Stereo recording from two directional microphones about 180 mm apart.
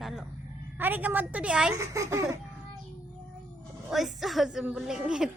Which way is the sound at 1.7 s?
15° right (ahead or behind).